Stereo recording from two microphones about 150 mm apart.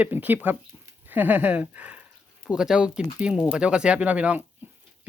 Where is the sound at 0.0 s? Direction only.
10° right (ahead or behind).